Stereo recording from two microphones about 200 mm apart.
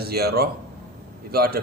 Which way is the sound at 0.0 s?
50° right (ahead or behind).